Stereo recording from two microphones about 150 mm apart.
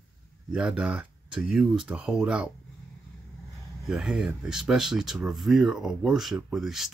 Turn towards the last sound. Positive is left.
turn(degrees=0)  # may be behind; listen again after turning